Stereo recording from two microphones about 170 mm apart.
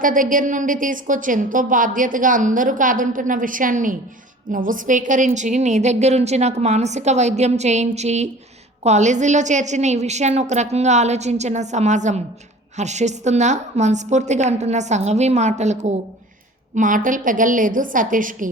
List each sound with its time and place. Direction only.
0.0 s a woman's voice: 50° right (ahead or behind)